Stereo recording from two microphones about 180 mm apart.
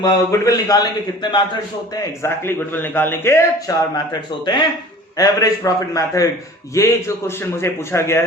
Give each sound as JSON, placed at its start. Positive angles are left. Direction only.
{"t": 0.0, "sound": "a man's voice", "side_deg": 20}